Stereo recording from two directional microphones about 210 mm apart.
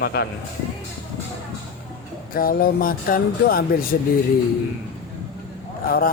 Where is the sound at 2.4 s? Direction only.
45° left (ahead or behind).